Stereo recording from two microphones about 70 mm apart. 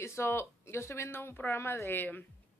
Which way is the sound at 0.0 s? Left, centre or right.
Left.